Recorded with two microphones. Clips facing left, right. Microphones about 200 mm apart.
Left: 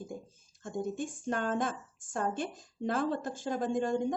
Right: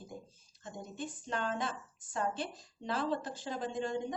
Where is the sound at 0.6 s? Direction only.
50° left (ahead or behind).